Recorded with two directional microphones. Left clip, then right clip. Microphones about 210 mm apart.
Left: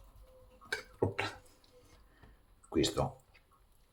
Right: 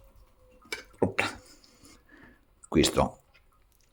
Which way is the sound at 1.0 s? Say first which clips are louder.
Right 8 dB; 50° right (ahead or behind).